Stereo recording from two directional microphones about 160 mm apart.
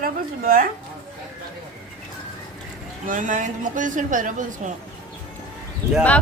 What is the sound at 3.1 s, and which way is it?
A woman's voice, 55° right (ahead or behind).